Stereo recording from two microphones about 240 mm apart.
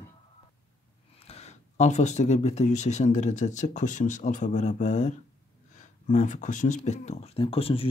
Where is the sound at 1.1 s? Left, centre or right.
Left.